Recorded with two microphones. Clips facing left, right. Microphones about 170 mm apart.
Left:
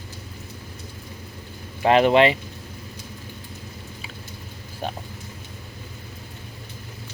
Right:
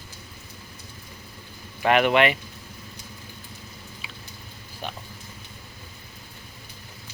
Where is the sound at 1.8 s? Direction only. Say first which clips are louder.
Left 4 dB; 30° left (ahead or behind).